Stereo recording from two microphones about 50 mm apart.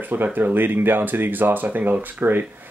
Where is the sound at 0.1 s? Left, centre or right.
Right.